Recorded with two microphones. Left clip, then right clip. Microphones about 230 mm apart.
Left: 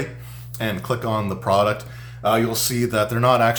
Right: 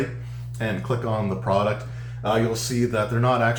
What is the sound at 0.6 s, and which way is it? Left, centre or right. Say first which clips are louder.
Speech: left 2 dB; left.